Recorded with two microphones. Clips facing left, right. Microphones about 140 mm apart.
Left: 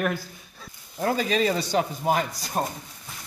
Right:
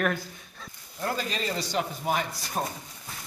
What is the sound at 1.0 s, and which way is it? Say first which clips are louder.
Speech: left 7 dB; 65° left (ahead or behind).